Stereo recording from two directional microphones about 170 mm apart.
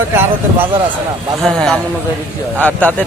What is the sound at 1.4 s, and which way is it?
Speech, 5° left (ahead or behind).